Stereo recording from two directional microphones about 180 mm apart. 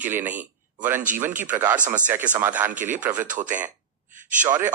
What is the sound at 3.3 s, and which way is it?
Speech, 45° right (ahead or behind).